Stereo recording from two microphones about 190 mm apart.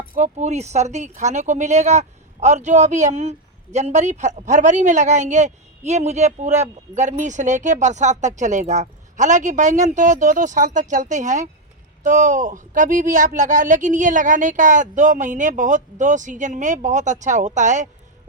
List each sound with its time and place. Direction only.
0.1 s speech: 40° right (ahead or behind)